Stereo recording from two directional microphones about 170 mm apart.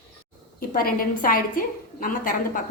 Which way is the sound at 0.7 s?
60° left (ahead or behind).